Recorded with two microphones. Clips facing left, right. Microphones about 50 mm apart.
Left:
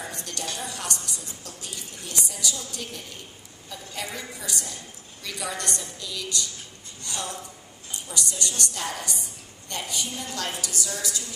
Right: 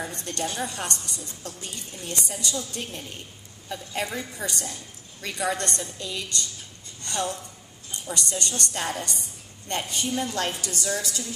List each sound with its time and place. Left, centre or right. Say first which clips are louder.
0.1 s a woman's voice: right 3 dB; right